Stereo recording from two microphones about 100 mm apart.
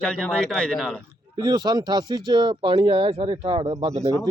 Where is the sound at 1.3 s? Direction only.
45° right (ahead or behind); by 4.1 s 85° right.